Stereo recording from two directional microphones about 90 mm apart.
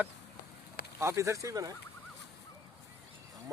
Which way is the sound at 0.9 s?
30° right (ahead or behind).